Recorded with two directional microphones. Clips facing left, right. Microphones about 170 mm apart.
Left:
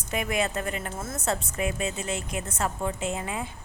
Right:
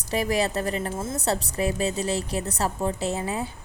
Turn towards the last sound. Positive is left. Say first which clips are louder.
# right 3 dB
turn(degrees=-35)  # may be behind; listen again after turning